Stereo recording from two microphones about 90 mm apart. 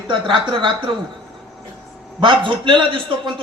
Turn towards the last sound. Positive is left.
turn(degrees=-65)  # may be behind; listen again after turning